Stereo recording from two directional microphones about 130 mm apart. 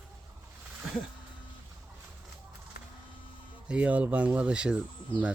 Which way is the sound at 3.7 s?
10° right (ahead or behind).